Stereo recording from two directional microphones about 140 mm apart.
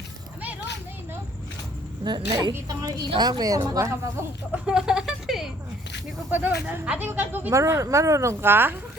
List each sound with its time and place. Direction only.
2.0 s speech: 35° right (ahead or behind)
4.6 s a sound: 5° right (ahead or behind)
6.3 s speech: 10° right (ahead or behind)